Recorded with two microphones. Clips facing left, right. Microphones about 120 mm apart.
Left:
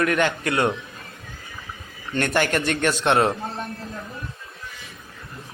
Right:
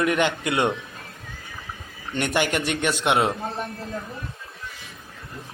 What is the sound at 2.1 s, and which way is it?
A man's voice, 15° right (ahead or behind).